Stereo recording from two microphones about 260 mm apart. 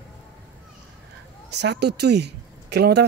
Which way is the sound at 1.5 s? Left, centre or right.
Right.